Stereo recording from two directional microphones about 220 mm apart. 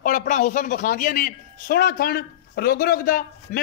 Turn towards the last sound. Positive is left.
turn(degrees=40)  # may be behind; listen again after turning